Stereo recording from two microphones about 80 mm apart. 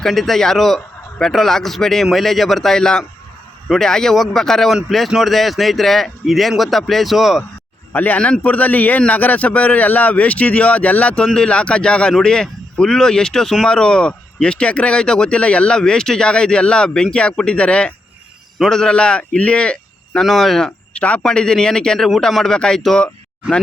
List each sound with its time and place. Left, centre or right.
0.0 s a man's voice: centre
7.9 s speech: left
20.2 s a man's voice: centre